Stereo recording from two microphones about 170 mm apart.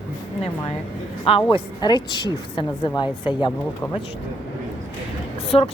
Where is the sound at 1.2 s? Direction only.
30° left (ahead or behind).